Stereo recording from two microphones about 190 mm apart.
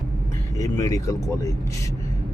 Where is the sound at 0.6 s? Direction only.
15° left (ahead or behind).